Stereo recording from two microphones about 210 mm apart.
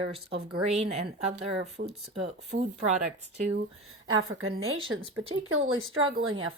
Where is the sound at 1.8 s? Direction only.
45° right (ahead or behind).